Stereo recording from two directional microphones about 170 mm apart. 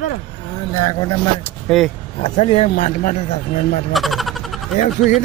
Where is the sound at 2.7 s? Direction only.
45° left (ahead or behind).